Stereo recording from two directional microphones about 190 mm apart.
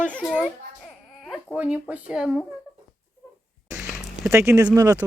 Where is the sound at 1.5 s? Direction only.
5° right (ahead or behind).